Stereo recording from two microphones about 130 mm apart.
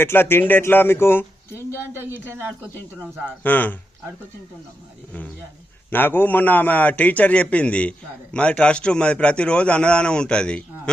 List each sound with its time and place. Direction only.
0.0 s a man's voice: 15° left (ahead or behind)
1.7 s speech: 15° right (ahead or behind)
3.4 s a man's voice: 15° left (ahead or behind)
5.9 s a man's voice: 15° left (ahead or behind)